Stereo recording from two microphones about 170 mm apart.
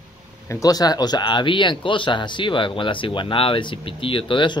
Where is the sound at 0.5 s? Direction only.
20° left (ahead or behind).